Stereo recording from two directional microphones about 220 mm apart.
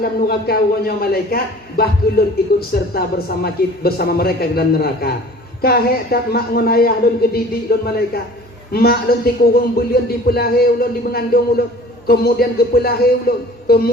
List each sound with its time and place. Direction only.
0.0 s a man's voice: 45° left (ahead or behind)